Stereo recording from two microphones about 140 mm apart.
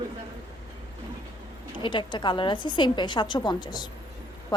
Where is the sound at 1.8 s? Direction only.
35° left (ahead or behind).